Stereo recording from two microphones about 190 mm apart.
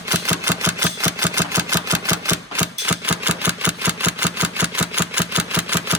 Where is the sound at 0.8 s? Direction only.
15° right (ahead or behind).